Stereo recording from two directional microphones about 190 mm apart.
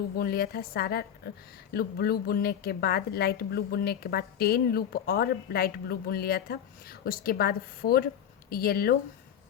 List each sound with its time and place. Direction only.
0.2 s a woman's voice: 55° left (ahead or behind)